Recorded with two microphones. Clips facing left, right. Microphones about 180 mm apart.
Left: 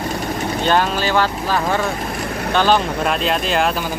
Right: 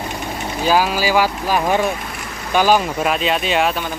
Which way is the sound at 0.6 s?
5° right (ahead or behind).